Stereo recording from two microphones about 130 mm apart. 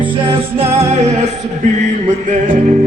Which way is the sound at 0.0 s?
40° right (ahead or behind).